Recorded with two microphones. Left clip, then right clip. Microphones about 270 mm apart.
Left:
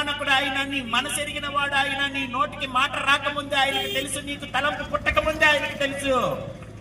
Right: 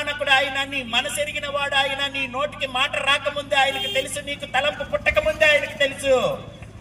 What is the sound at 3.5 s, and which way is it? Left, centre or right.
A man's voice, right.